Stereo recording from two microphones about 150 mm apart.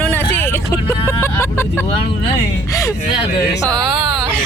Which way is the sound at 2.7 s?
20° left (ahead or behind).